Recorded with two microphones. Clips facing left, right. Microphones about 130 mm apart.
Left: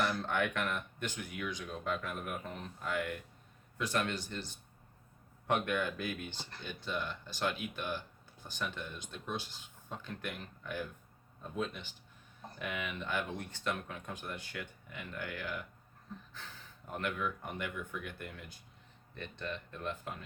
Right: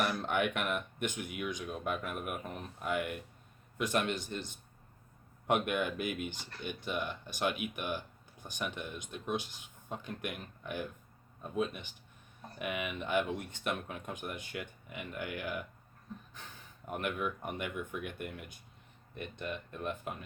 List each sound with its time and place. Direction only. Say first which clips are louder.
0.0 s speech: right 1 dB; 15° right (ahead or behind)